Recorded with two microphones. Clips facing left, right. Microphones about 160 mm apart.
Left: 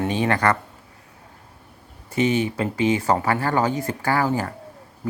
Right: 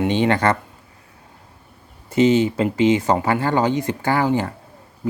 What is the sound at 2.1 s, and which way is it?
Speech, 25° right (ahead or behind).